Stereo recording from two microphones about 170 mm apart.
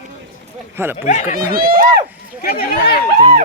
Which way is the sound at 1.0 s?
45° left (ahead or behind).